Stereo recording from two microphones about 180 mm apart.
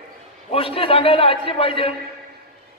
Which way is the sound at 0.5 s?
30° left (ahead or behind).